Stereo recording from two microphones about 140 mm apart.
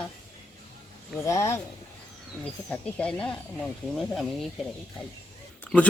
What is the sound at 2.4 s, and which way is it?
Speech, 10° left (ahead or behind).